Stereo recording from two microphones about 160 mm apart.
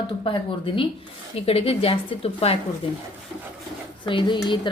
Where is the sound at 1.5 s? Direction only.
35° left (ahead or behind).